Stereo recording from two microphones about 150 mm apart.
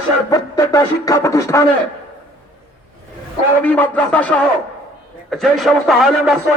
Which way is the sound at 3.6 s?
10° left (ahead or behind).